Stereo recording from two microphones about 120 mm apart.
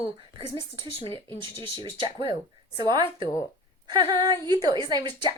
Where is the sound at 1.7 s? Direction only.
40° right (ahead or behind).